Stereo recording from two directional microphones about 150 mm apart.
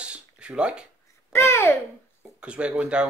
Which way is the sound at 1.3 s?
15° left (ahead or behind).